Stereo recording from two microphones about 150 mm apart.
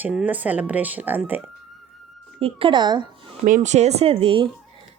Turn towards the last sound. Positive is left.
turn(degrees=-35)  # may be behind; listen again after turning